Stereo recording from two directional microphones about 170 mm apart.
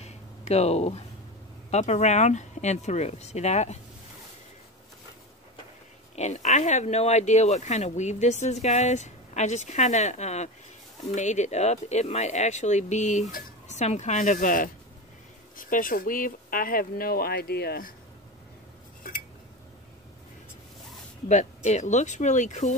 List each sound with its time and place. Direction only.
0.0 s a sound: 40° left (ahead or behind)
1.7 s speech: 40° left (ahead or behind)
6.1 s speech: 45° left (ahead or behind); by 17.9 s 65° left (ahead or behind)
21.3 s speech: 45° left (ahead or behind)